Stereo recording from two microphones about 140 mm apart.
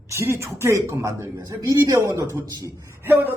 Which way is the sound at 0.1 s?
20° right (ahead or behind).